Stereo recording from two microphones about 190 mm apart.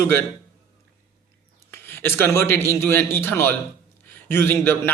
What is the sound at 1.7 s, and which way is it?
A man's voice, 10° left (ahead or behind).